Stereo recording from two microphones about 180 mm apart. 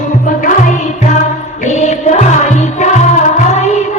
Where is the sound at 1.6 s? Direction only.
40° left (ahead or behind).